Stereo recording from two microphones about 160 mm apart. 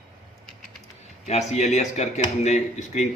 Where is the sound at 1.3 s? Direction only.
45° left (ahead or behind).